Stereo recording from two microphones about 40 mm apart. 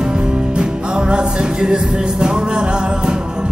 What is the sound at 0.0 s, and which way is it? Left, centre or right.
Music, centre.